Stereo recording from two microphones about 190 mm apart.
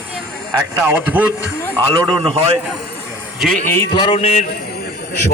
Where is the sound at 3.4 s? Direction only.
Centre (ahead or behind).